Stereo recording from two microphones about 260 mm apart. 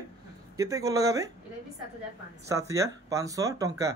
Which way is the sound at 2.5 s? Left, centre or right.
Centre.